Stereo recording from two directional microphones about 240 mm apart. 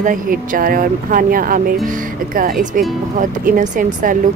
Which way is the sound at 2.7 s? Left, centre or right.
Right.